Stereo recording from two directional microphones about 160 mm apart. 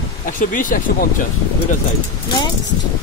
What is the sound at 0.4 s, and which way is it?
Speech, 60° left (ahead or behind).